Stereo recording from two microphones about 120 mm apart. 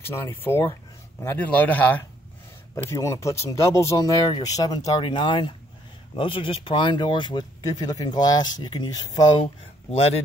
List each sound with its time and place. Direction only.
0.0 s speech: 20° left (ahead or behind)
2.9 s speech: 25° left (ahead or behind)
9.4 s speech: 55° left (ahead or behind)